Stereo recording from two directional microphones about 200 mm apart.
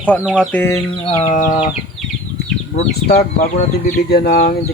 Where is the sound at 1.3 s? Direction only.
35° left (ahead or behind).